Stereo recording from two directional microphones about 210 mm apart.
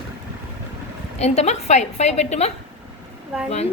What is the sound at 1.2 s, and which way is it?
A child's voice, 30° left (ahead or behind).